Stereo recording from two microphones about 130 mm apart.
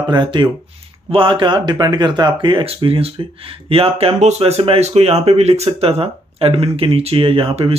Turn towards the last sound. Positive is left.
turn(degrees=-45)  # may be behind; listen again after turning